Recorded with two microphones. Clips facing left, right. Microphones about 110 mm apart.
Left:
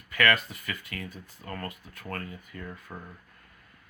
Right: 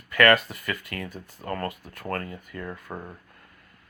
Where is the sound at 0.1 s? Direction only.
60° right (ahead or behind).